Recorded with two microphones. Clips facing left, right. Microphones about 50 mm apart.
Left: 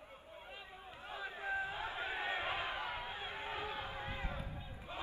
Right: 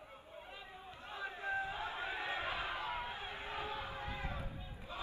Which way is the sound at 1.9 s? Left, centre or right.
Left.